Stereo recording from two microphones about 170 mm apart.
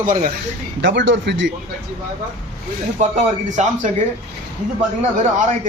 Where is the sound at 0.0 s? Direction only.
55° right (ahead or behind).